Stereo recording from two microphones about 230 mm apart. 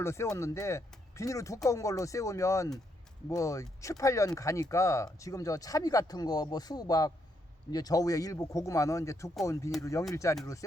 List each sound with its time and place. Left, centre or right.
0.0 s speech: centre